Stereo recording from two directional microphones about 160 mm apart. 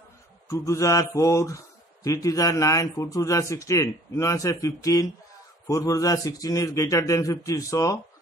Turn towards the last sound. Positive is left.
turn(degrees=20)  # may be behind; listen again after turning